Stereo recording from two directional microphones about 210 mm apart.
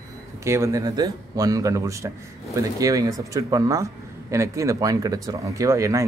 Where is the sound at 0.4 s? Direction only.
15° right (ahead or behind).